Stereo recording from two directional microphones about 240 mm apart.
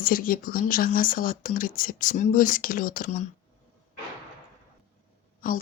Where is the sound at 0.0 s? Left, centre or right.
Left.